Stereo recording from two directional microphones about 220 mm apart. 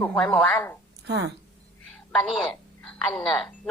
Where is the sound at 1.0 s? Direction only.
50° right (ahead or behind).